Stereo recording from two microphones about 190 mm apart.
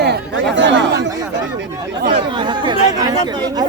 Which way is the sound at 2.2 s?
25° right (ahead or behind).